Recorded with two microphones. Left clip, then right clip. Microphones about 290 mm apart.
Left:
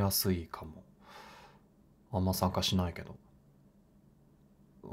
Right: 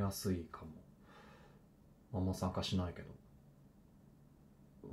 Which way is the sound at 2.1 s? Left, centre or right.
Centre.